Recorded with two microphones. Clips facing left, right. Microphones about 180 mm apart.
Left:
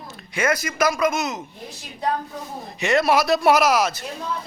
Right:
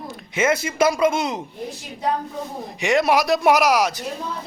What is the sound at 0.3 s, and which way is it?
Speech, 25° right (ahead or behind).